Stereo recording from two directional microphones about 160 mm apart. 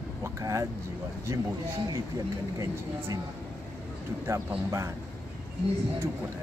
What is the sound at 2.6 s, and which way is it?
Speech, 20° right (ahead or behind).